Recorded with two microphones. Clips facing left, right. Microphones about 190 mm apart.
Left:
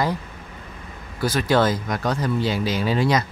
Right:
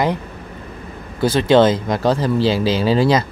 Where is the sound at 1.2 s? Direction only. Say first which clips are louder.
Right 7 dB; 25° right (ahead or behind).